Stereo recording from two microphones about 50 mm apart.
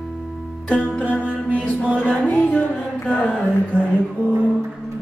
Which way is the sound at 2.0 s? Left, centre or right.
Left.